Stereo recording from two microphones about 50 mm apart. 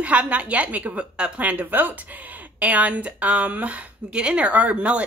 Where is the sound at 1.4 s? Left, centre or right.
Right.